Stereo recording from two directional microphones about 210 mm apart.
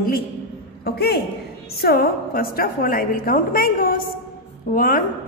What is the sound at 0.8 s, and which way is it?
A woman's voice, 50° left (ahead or behind).